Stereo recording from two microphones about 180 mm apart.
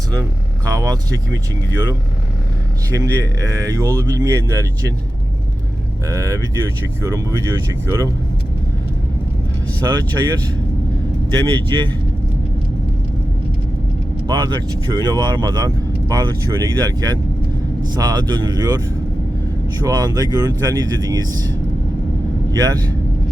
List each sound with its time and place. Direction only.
0.1 s speech: 20° right (ahead or behind)
2.9 s speech: 20° right (ahead or behind)
6.1 s speech: 15° right (ahead or behind)
9.8 s speech: 20° right (ahead or behind)
14.3 s speech: 25° right (ahead or behind)
19.8 s speech: 20° right (ahead or behind)
22.5 s speech: 20° right (ahead or behind)